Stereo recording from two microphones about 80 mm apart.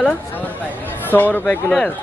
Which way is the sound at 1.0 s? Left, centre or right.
Left.